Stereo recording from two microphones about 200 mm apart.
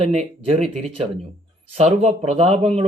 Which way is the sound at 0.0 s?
30° right (ahead or behind).